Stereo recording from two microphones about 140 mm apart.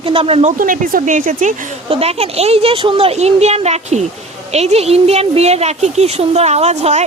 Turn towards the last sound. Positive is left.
turn(degrees=-55)  # may be behind; listen again after turning